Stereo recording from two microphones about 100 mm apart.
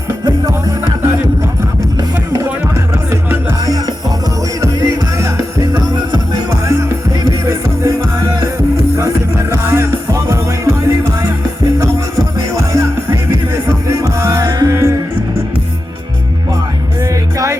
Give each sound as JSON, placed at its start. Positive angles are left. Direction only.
{"t": 0.3, "sound": "music", "side_deg": -45}
{"t": 2.0, "sound": "music", "side_deg": -40}
{"t": 3.1, "sound": "music", "side_deg": -20}
{"t": 4.6, "sound": "music", "side_deg": -35}
{"t": 9.0, "sound": "music", "side_deg": -30}
{"t": 17.0, "sound": "music", "side_deg": -35}